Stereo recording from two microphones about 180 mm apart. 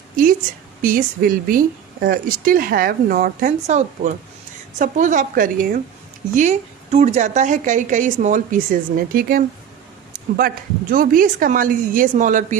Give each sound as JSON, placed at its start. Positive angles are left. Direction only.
{"t": 0.8, "sound": "a woman's voice", "side_deg": -50}
{"t": 10.1, "sound": "a sound", "side_deg": -55}
{"t": 10.9, "sound": "a woman's voice", "side_deg": -50}